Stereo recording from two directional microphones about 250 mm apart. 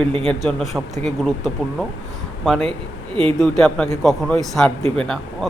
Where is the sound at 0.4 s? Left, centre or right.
Centre.